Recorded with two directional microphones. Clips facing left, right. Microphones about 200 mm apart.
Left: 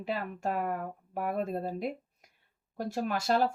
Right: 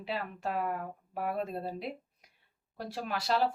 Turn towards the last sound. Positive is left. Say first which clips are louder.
# left 3 dB
turn(degrees=45)  # may be behind; listen again after turning